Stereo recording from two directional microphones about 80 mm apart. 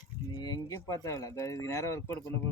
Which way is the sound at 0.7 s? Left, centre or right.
Left.